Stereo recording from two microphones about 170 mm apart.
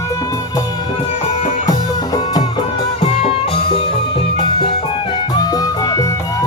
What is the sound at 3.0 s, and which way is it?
Music, 35° left (ahead or behind).